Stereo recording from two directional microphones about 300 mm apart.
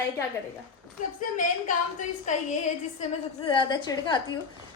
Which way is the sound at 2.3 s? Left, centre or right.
Left.